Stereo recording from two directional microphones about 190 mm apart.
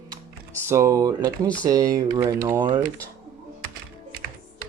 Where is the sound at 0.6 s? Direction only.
15° right (ahead or behind).